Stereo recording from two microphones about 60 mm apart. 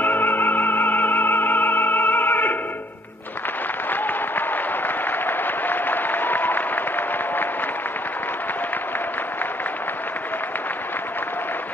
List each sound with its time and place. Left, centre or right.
0.0 s music: left
3.9 s applause: left